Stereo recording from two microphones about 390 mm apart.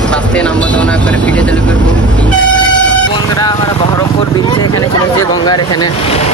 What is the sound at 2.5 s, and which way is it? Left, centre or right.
Toot, centre.